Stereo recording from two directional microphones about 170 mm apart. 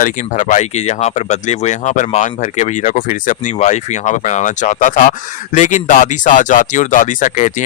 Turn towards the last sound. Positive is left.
turn(degrees=45)  # may be behind; listen again after turning